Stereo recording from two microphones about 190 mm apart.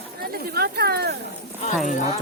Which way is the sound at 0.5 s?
55° right (ahead or behind).